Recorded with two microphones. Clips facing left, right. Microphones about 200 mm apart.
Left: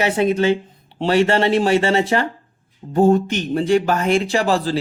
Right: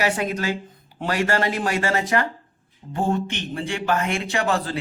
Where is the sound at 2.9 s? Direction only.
40° left (ahead or behind).